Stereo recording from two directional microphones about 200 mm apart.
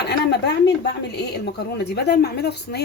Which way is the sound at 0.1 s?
55° left (ahead or behind).